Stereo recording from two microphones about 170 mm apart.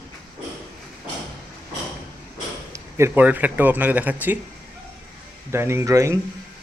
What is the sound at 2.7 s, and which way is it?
Speech, 15° right (ahead or behind).